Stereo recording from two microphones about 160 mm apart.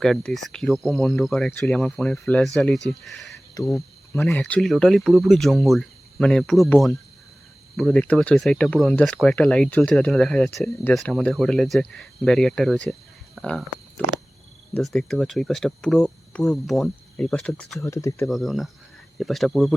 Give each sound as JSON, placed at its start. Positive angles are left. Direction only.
{"t": 0.0, "sound": "speech", "side_deg": 5}
{"t": 3.8, "sound": "cricket", "side_deg": 15}
{"t": 4.3, "sound": "speech", "side_deg": 5}
{"t": 17.8, "sound": "speech", "side_deg": 20}
{"t": 18.3, "sound": "speech", "side_deg": 0}